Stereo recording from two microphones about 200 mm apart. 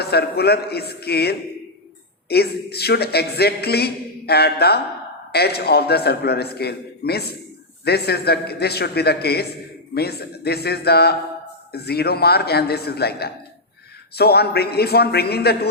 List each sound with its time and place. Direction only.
0.0 s a man's voice: 55° left (ahead or behind)